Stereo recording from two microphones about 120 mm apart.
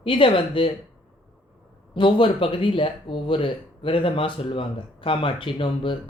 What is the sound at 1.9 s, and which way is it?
Speech, 45° left (ahead or behind).